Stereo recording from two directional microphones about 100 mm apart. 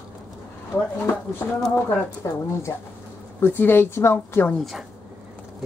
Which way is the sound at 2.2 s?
35° left (ahead or behind).